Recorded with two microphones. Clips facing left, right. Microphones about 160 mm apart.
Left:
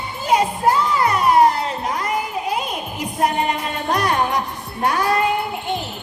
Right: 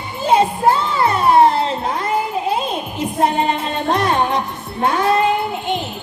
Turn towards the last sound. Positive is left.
turn(degrees=-20)  # may be behind; listen again after turning